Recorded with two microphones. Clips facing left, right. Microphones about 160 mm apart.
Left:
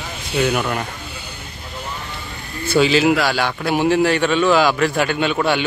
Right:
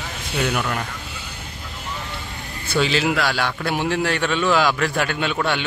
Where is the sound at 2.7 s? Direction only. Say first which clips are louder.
Left 5 dB; 5° left (ahead or behind).